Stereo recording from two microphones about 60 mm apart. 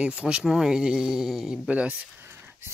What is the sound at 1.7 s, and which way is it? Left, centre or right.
Speech, centre.